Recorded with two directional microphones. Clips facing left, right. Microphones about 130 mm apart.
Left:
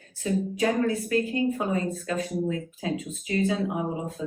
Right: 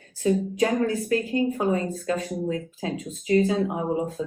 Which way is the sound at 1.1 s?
30° right (ahead or behind).